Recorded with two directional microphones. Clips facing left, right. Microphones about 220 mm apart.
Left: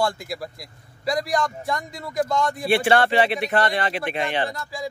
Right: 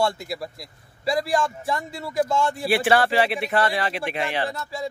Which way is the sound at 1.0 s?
30° right (ahead or behind).